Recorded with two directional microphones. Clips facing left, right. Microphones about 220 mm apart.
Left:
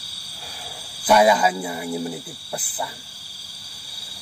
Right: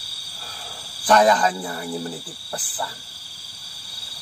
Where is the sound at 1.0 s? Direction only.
10° left (ahead or behind).